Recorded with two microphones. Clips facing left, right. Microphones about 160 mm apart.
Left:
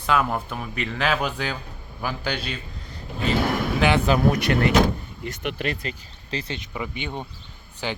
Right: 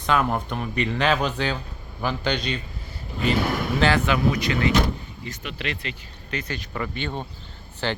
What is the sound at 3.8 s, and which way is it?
Speech, 15° left (ahead or behind).